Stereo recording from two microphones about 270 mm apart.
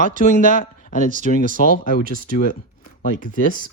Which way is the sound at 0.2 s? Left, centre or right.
Left.